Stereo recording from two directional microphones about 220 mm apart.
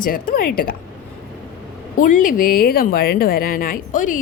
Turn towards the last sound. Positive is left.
turn(degrees=35)  # may be behind; listen again after turning